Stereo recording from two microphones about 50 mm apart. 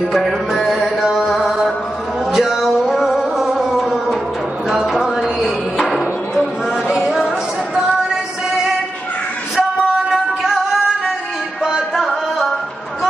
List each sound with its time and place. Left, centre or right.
0.7 s music: centre
4.6 s a sound: centre
7.1 s chatter: centre
7.7 s music: centre
10.1 s music: centre